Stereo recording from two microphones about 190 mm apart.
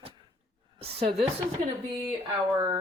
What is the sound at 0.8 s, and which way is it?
Speech, 30° right (ahead or behind).